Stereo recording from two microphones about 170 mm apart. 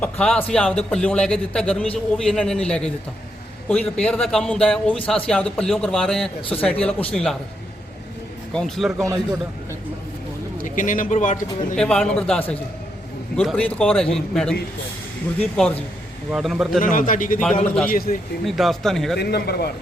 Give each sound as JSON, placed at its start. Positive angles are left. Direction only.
{"t": 0.0, "sound": "a man's voice", "side_deg": 5}
{"t": 8.5, "sound": "a man's voice", "side_deg": 5}
{"t": 10.6, "sound": "a man's voice", "side_deg": 50}
{"t": 11.8, "sound": "a man's voice", "side_deg": 5}
{"t": 15.4, "sound": "a man's voice", "side_deg": 5}
{"t": 16.8, "sound": "a man's voice", "side_deg": 50}
{"t": 18.4, "sound": "a man's voice", "side_deg": 0}
{"t": 19.1, "sound": "speech", "side_deg": 70}